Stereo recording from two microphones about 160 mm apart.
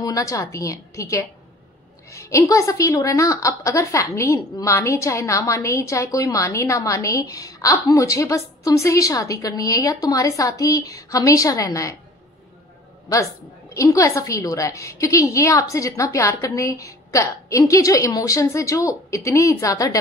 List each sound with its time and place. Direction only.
0.0 s a woman's voice: 20° left (ahead or behind)
13.7 s a woman's voice: 20° left (ahead or behind)